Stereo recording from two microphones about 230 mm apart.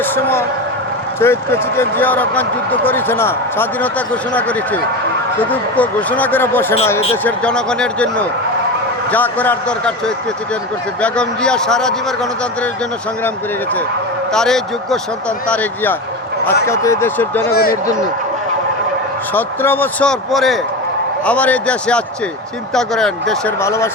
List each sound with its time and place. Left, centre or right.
0.0 s a man's voice: centre
11.0 s a man's voice: centre
14.3 s a man's voice: centre
17.5 s a man's voice: left
19.3 s a man's voice: centre